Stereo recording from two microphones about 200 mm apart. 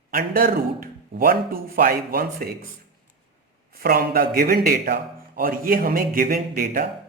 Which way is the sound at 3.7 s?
50° right (ahead or behind).